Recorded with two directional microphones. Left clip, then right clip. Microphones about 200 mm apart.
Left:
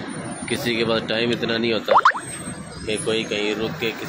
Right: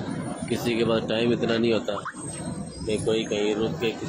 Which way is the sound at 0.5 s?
Centre (ahead or behind).